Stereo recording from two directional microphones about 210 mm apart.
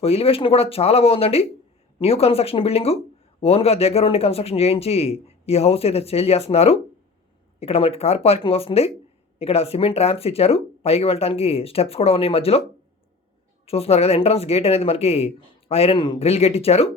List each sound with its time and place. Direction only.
0.0 s speech: 30° left (ahead or behind)
13.7 s speech: 30° left (ahead or behind)